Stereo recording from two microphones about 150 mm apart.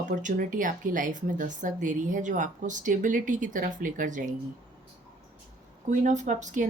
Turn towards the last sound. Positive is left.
turn(degrees=-55)  # may be behind; listen again after turning